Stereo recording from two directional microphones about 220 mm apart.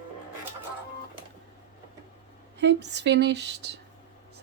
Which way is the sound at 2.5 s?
50° right (ahead or behind).